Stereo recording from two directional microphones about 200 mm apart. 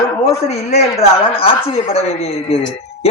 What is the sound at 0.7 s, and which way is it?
A woman's voice, 30° left (ahead or behind).